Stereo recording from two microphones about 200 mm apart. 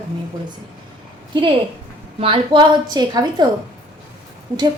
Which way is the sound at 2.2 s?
25° right (ahead or behind).